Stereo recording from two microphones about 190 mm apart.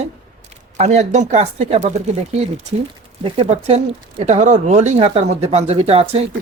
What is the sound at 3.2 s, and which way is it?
Speech, 35° right (ahead or behind).